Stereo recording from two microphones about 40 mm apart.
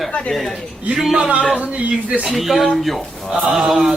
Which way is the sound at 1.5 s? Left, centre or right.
Right.